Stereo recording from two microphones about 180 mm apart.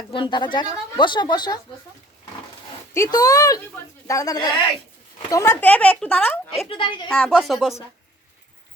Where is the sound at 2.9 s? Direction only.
20° left (ahead or behind).